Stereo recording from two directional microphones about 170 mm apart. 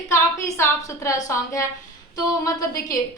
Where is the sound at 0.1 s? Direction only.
15° left (ahead or behind).